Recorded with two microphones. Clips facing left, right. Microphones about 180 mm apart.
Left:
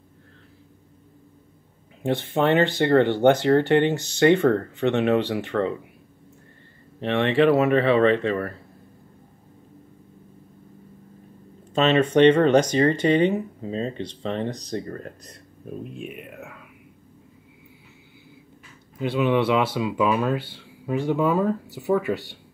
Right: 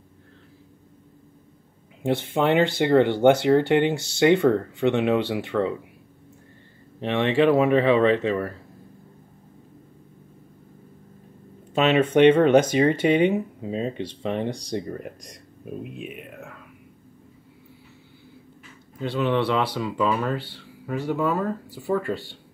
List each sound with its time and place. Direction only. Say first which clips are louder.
2.0 s speech: even; 15° right (ahead or behind)
7.0 s speech: left 1 dB; 15° right (ahead or behind)
11.7 s speech: even; 10° right (ahead or behind)
18.9 s speech: left 2 dB; 15° left (ahead or behind)